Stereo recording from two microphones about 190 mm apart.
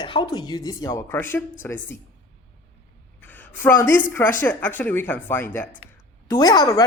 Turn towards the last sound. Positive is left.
turn(degrees=20)  # may be behind; listen again after turning